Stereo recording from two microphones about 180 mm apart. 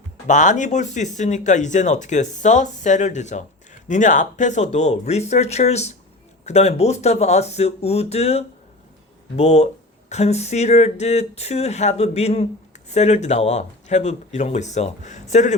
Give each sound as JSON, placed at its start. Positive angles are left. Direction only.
{"t": 0.3, "sound": "speech", "side_deg": 45}